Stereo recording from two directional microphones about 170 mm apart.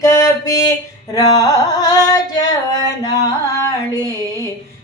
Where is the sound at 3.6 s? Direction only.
20° left (ahead or behind).